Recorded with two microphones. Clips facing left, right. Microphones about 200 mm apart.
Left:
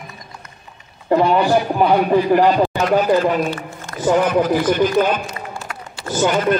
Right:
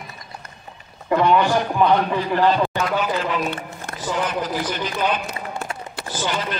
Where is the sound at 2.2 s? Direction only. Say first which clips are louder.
Left 5 dB; 15° left (ahead or behind).